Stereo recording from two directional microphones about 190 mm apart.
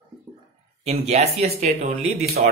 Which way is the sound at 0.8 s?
35° right (ahead or behind).